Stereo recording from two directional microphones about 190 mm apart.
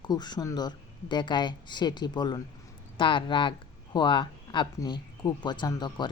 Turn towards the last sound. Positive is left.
turn(degrees=25)  # may be behind; listen again after turning